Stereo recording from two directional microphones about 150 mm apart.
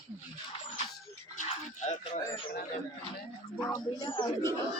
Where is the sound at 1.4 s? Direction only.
50° left (ahead or behind).